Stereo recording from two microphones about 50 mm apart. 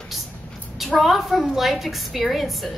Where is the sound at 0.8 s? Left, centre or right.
Centre.